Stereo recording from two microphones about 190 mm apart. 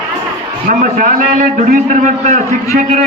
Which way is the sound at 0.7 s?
45° right (ahead or behind).